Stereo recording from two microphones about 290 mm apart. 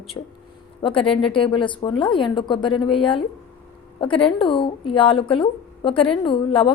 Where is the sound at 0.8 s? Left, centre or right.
Centre.